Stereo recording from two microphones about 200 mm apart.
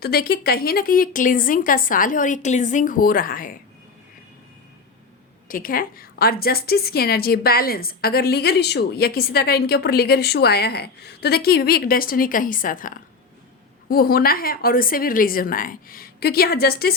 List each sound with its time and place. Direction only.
0.0 s a woman's voice: 50° left (ahead or behind)
5.5 s a woman's voice: 45° left (ahead or behind)